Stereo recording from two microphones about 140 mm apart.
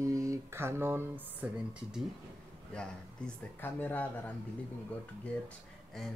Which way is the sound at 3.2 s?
5° left (ahead or behind).